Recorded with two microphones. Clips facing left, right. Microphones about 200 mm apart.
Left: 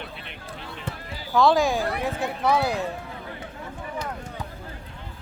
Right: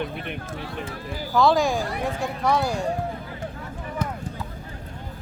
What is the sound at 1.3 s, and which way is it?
Speech, centre (ahead or behind).